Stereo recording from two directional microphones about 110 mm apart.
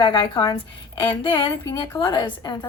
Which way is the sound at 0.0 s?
45° left (ahead or behind).